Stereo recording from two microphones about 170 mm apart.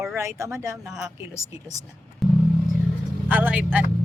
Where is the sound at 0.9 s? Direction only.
5° right (ahead or behind).